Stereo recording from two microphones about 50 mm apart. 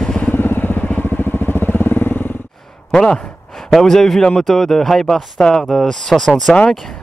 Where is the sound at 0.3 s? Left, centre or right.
Left.